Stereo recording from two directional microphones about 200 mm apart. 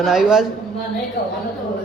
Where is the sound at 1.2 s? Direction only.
55° left (ahead or behind).